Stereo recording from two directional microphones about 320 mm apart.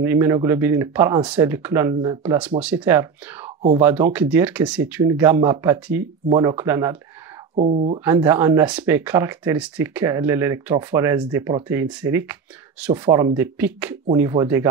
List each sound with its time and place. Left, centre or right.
0.0 s speech: centre
7.5 s speech: right
8.0 s speech: centre